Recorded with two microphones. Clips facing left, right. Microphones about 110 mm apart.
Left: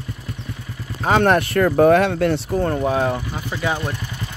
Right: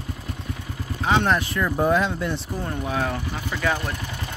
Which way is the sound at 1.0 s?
50° left (ahead or behind).